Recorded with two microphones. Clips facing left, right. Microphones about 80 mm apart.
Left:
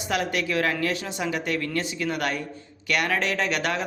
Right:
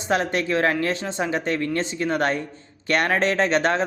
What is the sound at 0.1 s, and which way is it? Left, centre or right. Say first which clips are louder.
Speech: right 4 dB; right.